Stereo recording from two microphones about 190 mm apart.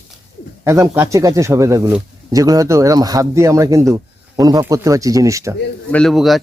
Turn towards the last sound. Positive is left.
turn(degrees=0)  # may be behind; listen again after turning